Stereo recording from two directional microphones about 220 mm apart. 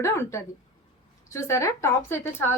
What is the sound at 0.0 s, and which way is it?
A woman's voice, 10° left (ahead or behind).